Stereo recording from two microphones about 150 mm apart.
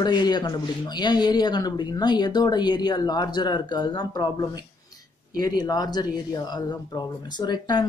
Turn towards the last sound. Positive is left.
turn(degrees=30)  # may be behind; listen again after turning